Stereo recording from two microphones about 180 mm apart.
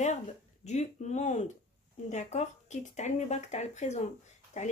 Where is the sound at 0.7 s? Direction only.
40° left (ahead or behind).